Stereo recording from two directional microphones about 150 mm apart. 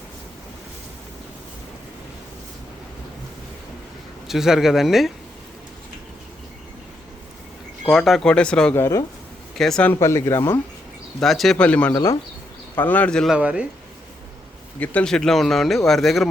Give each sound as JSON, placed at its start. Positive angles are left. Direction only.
{"t": 4.3, "sound": "speech", "side_deg": -5}
{"t": 7.9, "sound": "speech", "side_deg": 0}
{"t": 8.8, "sound": "speech", "side_deg": 20}
{"t": 9.6, "sound": "speech", "side_deg": 5}
{"t": 11.2, "sound": "speech", "side_deg": 0}
{"t": 13.3, "sound": "speech", "side_deg": -5}
{"t": 14.8, "sound": "speech", "side_deg": 5}